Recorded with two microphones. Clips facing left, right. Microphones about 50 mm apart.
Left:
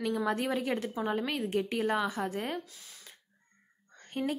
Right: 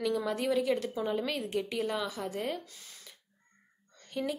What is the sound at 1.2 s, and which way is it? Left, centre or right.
A woman's voice, left.